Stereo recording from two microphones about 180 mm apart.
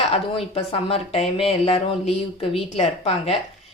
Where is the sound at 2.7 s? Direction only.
35° left (ahead or behind).